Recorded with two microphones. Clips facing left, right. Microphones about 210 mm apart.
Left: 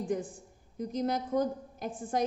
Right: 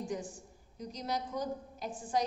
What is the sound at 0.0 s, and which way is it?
A woman's voice, 55° left (ahead or behind).